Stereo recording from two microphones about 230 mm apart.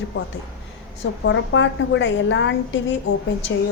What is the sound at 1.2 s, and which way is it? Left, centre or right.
A woman's voice, left.